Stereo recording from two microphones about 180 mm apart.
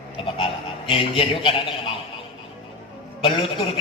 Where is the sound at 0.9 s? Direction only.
30° left (ahead or behind).